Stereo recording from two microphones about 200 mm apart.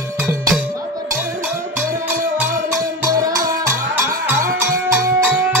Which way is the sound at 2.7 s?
15° right (ahead or behind).